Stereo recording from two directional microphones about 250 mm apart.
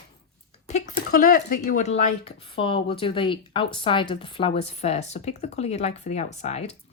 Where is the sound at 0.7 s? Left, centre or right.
Left.